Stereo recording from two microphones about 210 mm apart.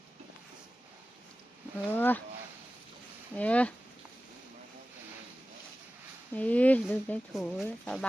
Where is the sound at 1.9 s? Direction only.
10° left (ahead or behind).